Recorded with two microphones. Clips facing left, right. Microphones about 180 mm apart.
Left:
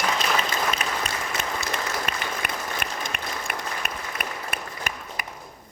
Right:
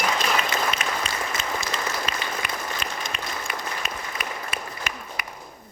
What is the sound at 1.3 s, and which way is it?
Applause, 60° left (ahead or behind).